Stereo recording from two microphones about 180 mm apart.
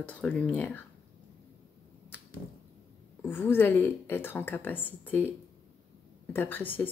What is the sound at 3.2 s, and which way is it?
A woman's voice, 10° left (ahead or behind).